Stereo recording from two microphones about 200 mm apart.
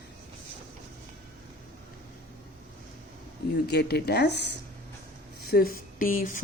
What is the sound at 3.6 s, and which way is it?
A woman's voice, 55° left (ahead or behind).